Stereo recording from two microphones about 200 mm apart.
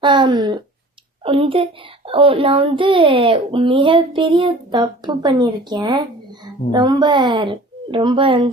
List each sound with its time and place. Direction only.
0.0 s a child's voice: 25° right (ahead or behind)